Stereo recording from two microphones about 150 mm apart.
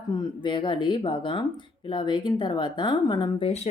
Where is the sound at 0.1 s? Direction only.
30° left (ahead or behind).